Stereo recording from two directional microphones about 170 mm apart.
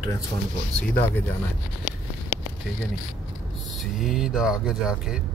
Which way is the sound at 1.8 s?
60° left (ahead or behind).